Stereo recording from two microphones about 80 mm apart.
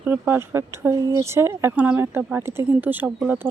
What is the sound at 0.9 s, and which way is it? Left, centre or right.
Speech, right.